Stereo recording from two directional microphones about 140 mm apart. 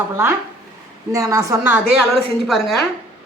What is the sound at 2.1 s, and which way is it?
Speech, centre (ahead or behind).